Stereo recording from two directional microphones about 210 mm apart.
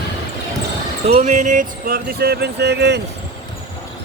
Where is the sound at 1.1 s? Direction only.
35° right (ahead or behind); by 3.0 s 55° right (ahead or behind).